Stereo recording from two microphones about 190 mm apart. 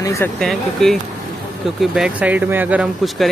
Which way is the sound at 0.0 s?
15° left (ahead or behind).